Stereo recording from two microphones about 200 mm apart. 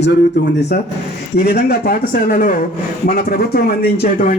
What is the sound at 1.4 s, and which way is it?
A man's voice, 50° left (ahead or behind).